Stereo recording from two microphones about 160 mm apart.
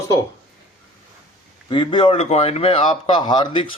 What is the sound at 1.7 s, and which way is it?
A man's voice, 30° left (ahead or behind).